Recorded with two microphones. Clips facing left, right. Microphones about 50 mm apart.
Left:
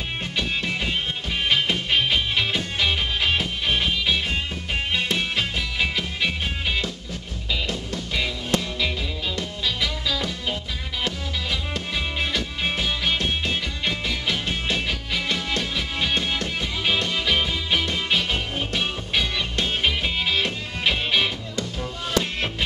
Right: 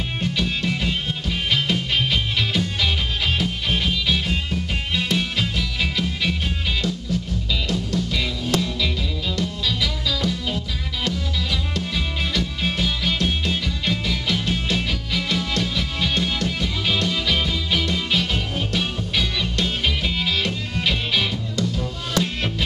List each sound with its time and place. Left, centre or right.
0.2 s music: centre
7.6 s music: centre
11.7 s music: centre